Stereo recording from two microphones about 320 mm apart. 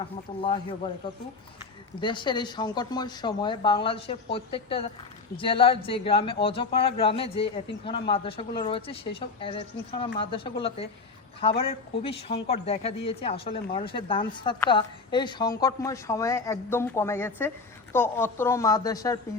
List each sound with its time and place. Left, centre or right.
0.0 s a woman's voice: centre
2.0 s a woman's voice: centre